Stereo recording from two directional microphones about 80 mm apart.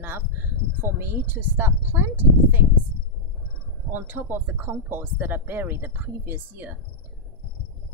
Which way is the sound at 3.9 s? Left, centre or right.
Right.